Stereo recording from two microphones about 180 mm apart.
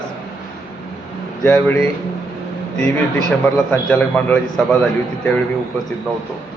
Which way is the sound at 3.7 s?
5° left (ahead or behind).